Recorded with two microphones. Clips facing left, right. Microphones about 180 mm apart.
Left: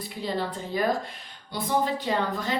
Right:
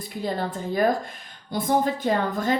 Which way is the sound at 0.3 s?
50° right (ahead or behind).